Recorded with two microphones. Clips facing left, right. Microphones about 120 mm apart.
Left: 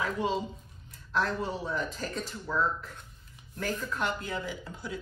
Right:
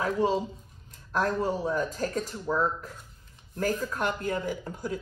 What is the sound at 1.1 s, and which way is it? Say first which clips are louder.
Speech: right 4 dB; 45° right (ahead or behind).